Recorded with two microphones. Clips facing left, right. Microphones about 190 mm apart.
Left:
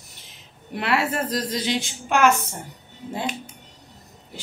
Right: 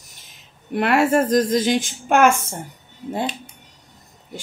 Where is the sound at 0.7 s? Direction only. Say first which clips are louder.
Right 7 dB; 50° right (ahead or behind).